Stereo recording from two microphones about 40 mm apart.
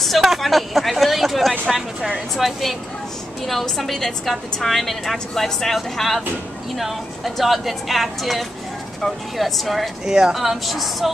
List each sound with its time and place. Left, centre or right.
0.2 s a sound: centre
1.7 s a woman's voice: centre
10.0 s a woman's voice: centre